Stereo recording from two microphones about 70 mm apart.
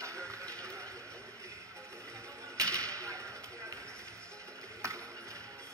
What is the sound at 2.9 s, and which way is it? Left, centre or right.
Whip, right.